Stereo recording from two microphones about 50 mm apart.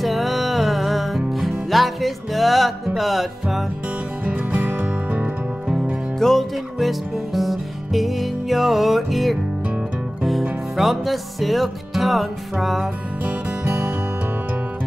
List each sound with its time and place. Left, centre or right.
0.0 s music: centre
4.2 s music: right
6.1 s music: centre
10.8 s music: centre
13.7 s music: right